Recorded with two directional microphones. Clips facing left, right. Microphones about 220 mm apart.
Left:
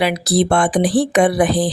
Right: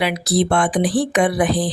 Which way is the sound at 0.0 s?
35° left (ahead or behind).